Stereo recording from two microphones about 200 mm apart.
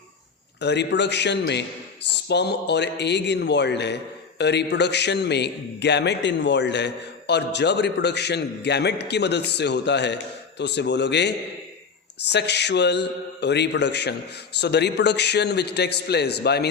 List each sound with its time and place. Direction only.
0.6 s a man's voice: 60° left (ahead or behind)